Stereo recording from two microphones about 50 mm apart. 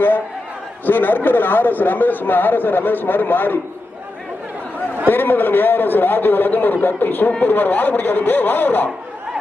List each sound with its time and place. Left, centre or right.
0.9 s speech: left
5.0 s speech: left